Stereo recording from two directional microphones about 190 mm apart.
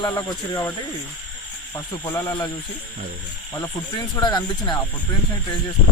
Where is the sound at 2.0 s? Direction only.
15° left (ahead or behind).